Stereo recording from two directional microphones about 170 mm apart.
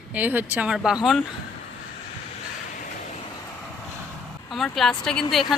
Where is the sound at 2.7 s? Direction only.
45° left (ahead or behind).